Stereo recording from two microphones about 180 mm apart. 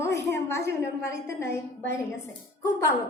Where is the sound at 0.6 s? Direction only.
60° right (ahead or behind).